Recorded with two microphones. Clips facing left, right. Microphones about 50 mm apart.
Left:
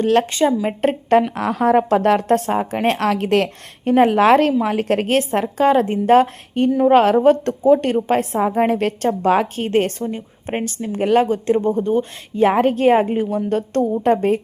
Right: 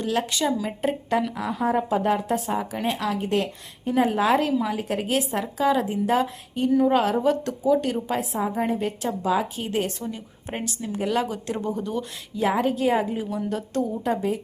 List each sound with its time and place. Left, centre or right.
0.0 s a woman's voice: left
0.3 s speech: left
1.4 s a woman's voice: left
2.8 s a woman's voice: left
10.1 s speech: left